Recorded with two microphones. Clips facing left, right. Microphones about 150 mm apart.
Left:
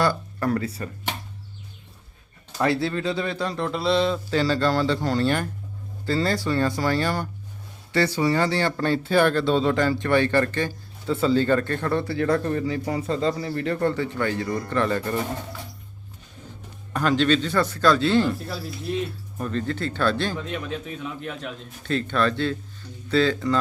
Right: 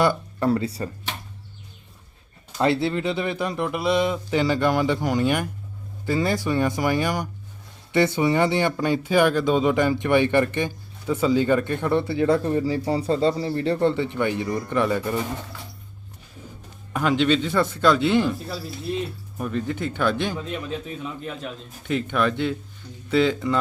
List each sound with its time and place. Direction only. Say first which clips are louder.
0.0 s speech: right 2 dB; 20° right (ahead or behind)
2.6 s speech: right 2 dB; 20° right (ahead or behind)
12.6 s speech: right 3 dB; 30° right (ahead or behind); by 15.2 s 10° right (ahead or behind)
16.9 s speech: even; 15° right (ahead or behind)
19.4 s speech: even; 10° right (ahead or behind)
21.0 s a man's voice: even; 5° right (ahead or behind)
21.8 s speech: even; 15° right (ahead or behind)